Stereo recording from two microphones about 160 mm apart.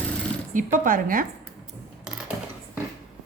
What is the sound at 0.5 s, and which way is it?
Speech, 55° right (ahead or behind).